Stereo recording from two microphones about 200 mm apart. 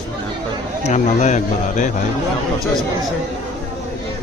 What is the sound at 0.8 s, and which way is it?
Speech, 35° left (ahead or behind).